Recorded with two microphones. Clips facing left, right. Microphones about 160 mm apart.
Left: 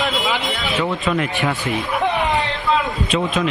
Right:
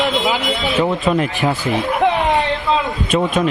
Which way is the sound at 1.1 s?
40° right (ahead or behind).